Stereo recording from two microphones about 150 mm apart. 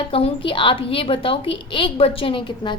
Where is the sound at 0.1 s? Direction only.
40° left (ahead or behind).